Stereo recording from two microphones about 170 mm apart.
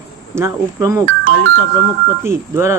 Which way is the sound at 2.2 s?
15° right (ahead or behind).